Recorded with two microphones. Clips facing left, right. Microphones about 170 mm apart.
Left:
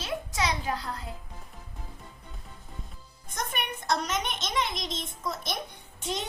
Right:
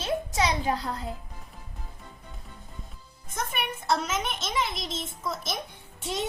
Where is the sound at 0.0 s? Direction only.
25° right (ahead or behind).